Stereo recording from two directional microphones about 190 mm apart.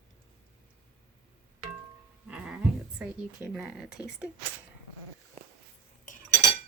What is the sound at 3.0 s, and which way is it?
Speech, 5° right (ahead or behind).